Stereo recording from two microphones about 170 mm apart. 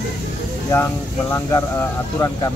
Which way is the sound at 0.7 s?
15° left (ahead or behind).